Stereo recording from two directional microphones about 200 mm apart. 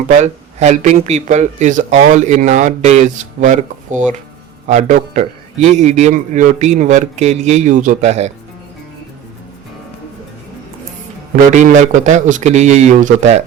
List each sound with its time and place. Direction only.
0.2 s speech: 35° right (ahead or behind)
11.5 s speech: 40° right (ahead or behind)